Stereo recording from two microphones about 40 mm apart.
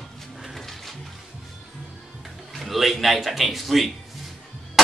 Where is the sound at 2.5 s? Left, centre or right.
Centre.